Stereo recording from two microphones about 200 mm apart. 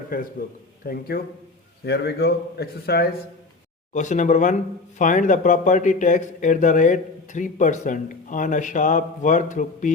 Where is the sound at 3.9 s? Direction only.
35° left (ahead or behind).